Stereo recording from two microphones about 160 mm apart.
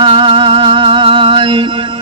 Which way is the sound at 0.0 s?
30° right (ahead or behind).